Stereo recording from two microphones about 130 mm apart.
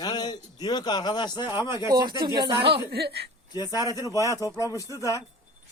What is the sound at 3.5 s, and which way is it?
A man's voice, 30° left (ahead or behind).